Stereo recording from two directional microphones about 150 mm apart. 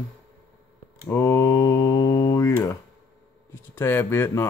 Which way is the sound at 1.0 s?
20° left (ahead or behind).